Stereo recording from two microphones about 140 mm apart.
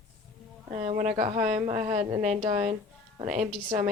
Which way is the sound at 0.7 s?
50° right (ahead or behind).